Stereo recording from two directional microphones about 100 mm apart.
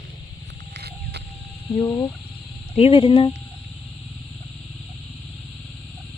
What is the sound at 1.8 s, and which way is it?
Speech, 35° left (ahead or behind).